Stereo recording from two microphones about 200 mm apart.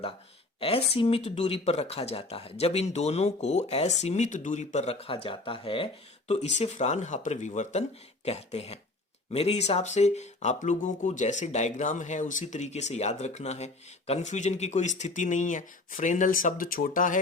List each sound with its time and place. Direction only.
0.6 s speech: 30° left (ahead or behind)